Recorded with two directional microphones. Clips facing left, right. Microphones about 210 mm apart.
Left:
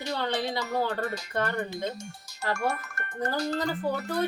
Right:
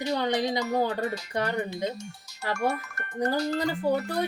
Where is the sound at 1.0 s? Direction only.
50° left (ahead or behind).